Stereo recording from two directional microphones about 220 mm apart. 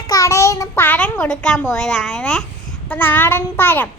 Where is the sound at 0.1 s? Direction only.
15° left (ahead or behind).